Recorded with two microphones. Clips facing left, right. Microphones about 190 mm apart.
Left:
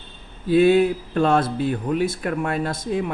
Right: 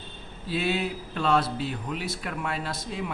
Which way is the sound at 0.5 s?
50° left (ahead or behind).